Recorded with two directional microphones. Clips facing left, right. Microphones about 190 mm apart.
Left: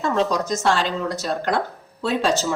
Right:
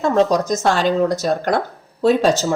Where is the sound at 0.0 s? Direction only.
45° right (ahead or behind).